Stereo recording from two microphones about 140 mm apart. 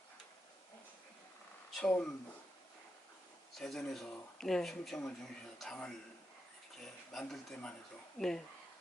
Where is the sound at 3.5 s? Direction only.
5° left (ahead or behind).